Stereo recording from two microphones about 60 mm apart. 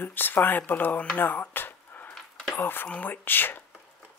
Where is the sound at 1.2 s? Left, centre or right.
Left.